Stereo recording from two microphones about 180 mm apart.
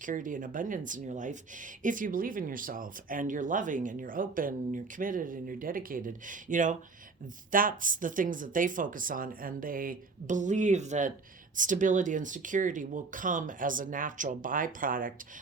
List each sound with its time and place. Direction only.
0.0 s speech: 45° right (ahead or behind)